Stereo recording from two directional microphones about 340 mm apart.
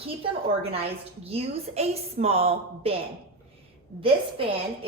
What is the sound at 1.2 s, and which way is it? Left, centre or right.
A woman's voice, centre.